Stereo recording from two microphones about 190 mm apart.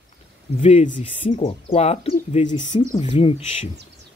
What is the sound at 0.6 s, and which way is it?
Speech, 30° left (ahead or behind).